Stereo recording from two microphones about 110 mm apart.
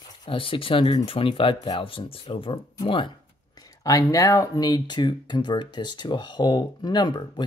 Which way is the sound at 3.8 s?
30° left (ahead or behind).